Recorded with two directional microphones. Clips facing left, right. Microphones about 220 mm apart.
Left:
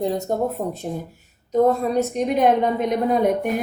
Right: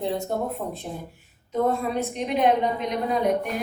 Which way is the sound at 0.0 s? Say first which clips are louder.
Left 4 dB; 40° left (ahead or behind).